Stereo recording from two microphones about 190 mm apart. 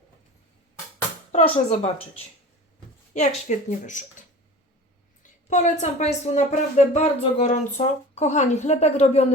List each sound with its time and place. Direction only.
1.3 s speech: 35° left (ahead or behind)
5.5 s speech: 40° left (ahead or behind)